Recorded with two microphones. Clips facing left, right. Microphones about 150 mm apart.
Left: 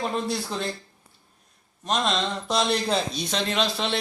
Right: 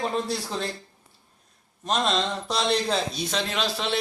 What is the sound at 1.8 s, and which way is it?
Speech, centre (ahead or behind).